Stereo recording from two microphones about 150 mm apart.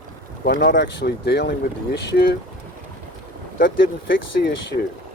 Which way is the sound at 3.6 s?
70° left (ahead or behind).